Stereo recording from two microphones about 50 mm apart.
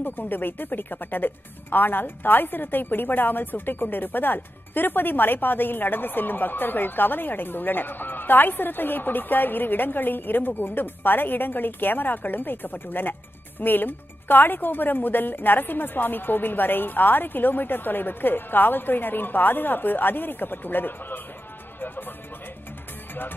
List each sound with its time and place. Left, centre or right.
0.0 s speech: left
21.7 s music: left